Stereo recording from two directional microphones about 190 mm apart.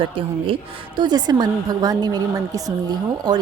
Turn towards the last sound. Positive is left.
turn(degrees=-20)  # may be behind; listen again after turning